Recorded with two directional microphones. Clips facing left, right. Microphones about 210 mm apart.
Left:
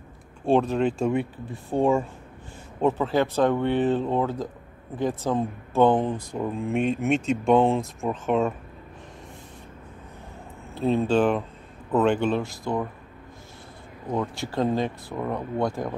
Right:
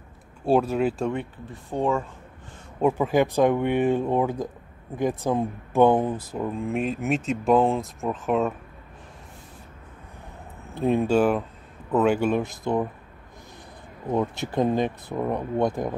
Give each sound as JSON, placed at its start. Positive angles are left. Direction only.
{"t": 0.5, "sound": "speech", "side_deg": -5}
{"t": 1.7, "sound": "speech", "side_deg": 15}
{"t": 2.8, "sound": "speech", "side_deg": -10}
{"t": 10.7, "sound": "speech", "side_deg": -15}
{"t": 14.1, "sound": "speech", "side_deg": -20}